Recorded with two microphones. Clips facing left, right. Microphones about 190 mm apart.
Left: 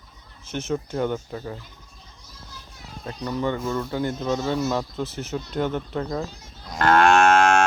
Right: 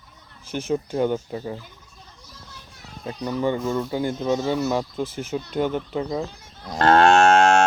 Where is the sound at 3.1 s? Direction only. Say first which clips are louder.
Right 2 dB; 15° right (ahead or behind).